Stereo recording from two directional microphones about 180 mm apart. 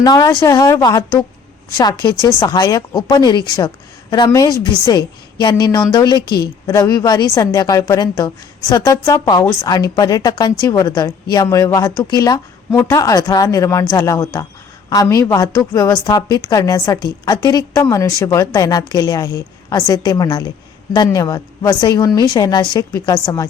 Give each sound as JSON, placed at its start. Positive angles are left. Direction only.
{"t": 0.0, "sound": "a woman's voice", "side_deg": 20}
{"t": 6.2, "sound": "a woman's voice", "side_deg": 65}
{"t": 6.7, "sound": "a woman's voice", "side_deg": 20}